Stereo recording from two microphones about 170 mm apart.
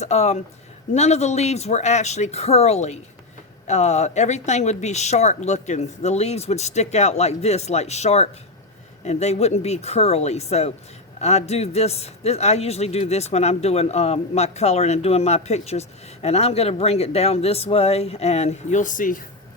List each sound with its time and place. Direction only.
0.0 s a man's voice: 40° left (ahead or behind)